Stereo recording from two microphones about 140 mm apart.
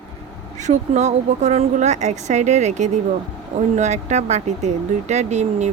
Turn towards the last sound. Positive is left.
turn(degrees=-55)  # may be behind; listen again after turning